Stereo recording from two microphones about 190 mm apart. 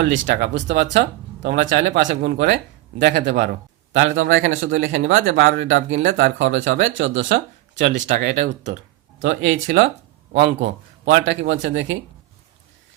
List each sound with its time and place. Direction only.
0.0 s speech: 70° right (ahead or behind)
3.9 s speech: 90° right
5.4 s speech: 50° right (ahead or behind)
5.6 s speech: 75° right (ahead or behind)
7.9 s speech: 65° right (ahead or behind)